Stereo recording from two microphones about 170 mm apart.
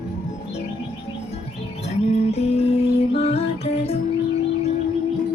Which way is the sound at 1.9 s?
40° left (ahead or behind).